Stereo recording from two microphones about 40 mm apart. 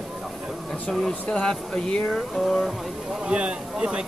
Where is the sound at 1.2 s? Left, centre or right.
Left.